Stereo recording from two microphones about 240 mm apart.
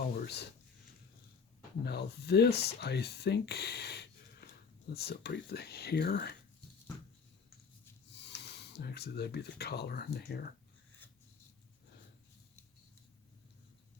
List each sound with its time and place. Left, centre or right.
0.2 s speech: left
1.8 s speech: left
8.1 s speech: left